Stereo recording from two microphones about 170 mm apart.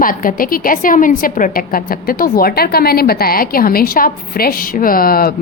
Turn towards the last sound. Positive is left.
turn(degrees=60)  # may be behind; listen again after turning